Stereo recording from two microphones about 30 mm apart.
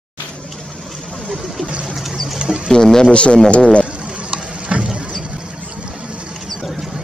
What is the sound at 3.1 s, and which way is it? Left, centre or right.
Speech, left.